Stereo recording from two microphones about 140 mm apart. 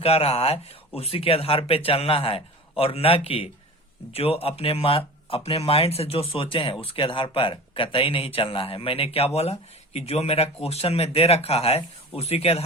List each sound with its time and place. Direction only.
0.0 s speech: 45° left (ahead or behind)